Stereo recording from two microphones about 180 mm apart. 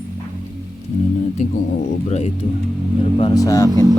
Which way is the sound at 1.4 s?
45° left (ahead or behind).